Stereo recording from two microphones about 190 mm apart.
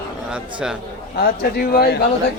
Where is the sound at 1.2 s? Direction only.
50° left (ahead or behind).